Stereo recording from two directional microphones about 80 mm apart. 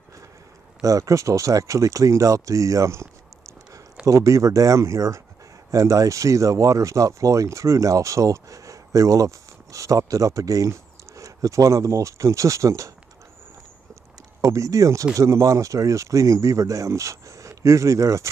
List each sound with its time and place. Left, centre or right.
0.8 s speech: right
14.4 s speech: right